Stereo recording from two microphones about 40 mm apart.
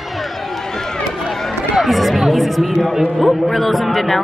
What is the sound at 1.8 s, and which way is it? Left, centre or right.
Chatter, centre.